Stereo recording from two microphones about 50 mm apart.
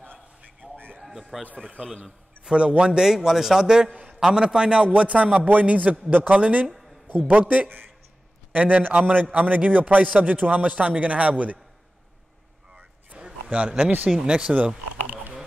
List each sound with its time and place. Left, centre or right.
0.6 s a sound: right
1.3 s speech: centre
2.4 s a man's voice: right
4.8 s a man's voice: right
13.2 s a sound: right
14.2 s a man's voice: right